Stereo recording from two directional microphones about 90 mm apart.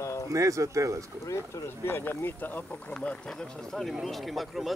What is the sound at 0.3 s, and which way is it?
Speech, 35° right (ahead or behind).